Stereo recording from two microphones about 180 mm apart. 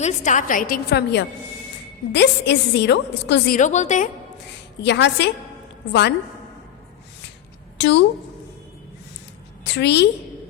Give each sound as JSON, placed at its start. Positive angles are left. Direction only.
{"t": 0.0, "sound": "a woman's voice", "side_deg": 45}
{"t": 3.6, "sound": "a woman's voice", "side_deg": 40}
{"t": 4.4, "sound": "a woman's voice", "side_deg": 70}
{"t": 7.8, "sound": "a woman's voice", "side_deg": 75}
{"t": 9.6, "sound": "a woman's voice", "side_deg": 75}